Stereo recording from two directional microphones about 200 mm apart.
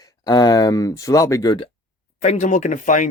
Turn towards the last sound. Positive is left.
turn(degrees=40)  # may be behind; listen again after turning